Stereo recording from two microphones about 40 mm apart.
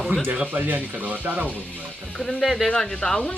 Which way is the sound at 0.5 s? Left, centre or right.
Right.